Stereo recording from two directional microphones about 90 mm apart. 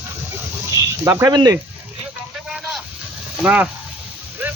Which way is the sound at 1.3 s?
45° right (ahead or behind).